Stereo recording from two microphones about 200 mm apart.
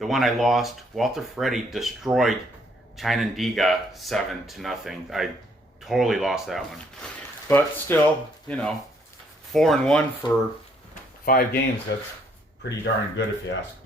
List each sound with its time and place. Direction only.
0.0 s speech: centre (ahead or behind)
7.0 s speech: 10° left (ahead or behind)
11.3 s speech: 50° left (ahead or behind)
11.9 s speech: 60° left (ahead or behind)